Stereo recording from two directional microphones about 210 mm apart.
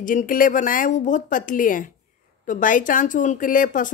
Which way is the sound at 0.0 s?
40° left (ahead or behind).